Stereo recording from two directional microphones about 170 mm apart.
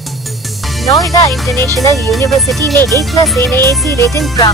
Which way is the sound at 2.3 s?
Centre (ahead or behind).